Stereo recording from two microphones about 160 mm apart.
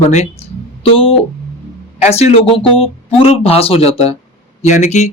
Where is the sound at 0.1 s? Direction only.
40° left (ahead or behind).